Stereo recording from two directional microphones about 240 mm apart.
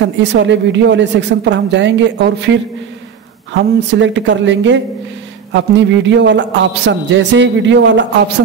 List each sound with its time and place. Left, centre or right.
0.0 s a woman's voice: right